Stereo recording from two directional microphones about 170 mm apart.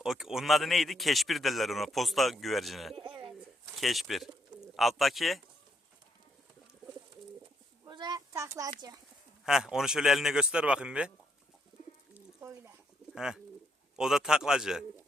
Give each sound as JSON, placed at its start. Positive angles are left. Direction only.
{"t": 0.0, "sound": "a man's voice", "side_deg": 0}
{"t": 2.9, "sound": "bird", "side_deg": -30}
{"t": 3.8, "sound": "a man's voice", "side_deg": 0}
{"t": 7.9, "sound": "a sound", "side_deg": -25}
{"t": 9.4, "sound": "a man's voice", "side_deg": -5}
{"t": 12.1, "sound": "bird", "side_deg": -15}
{"t": 13.1, "sound": "a man's voice", "side_deg": -5}